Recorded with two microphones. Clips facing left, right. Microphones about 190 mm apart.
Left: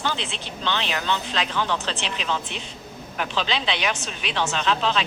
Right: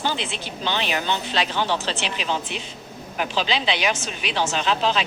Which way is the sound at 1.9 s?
5° right (ahead or behind).